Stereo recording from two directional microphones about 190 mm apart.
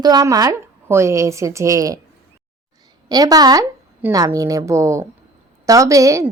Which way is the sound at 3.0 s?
20° right (ahead or behind).